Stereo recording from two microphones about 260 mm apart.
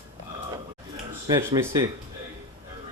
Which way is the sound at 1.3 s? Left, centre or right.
Centre.